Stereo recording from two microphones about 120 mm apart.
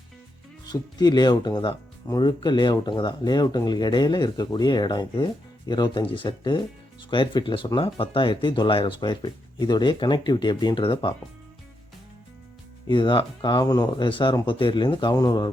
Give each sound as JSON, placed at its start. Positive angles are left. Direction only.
{"t": 0.7, "sound": "speech", "side_deg": 35}
{"t": 12.9, "sound": "speech", "side_deg": 40}